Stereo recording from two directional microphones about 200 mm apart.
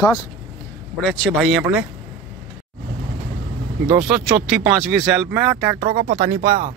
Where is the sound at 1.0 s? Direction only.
5° left (ahead or behind).